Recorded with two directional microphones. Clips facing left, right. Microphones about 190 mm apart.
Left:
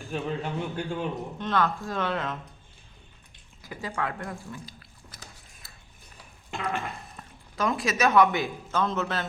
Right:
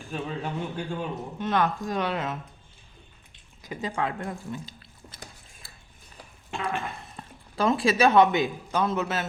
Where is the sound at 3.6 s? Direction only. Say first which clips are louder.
Right 3 dB; 20° right (ahead or behind).